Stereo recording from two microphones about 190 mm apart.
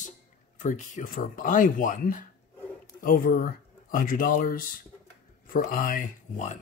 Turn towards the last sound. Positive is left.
turn(degrees=45)  # may be behind; listen again after turning